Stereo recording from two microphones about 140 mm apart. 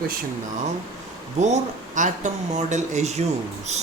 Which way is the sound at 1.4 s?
55° right (ahead or behind).